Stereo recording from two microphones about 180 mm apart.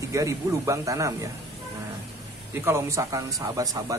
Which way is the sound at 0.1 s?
20° right (ahead or behind).